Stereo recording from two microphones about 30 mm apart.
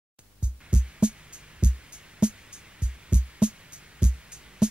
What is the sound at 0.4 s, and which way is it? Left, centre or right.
Music, right.